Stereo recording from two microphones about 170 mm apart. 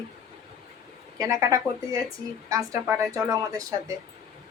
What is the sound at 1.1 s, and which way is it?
A woman's voice, 20° right (ahead or behind).